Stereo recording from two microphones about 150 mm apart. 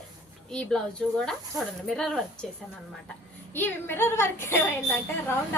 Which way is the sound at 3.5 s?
15° left (ahead or behind).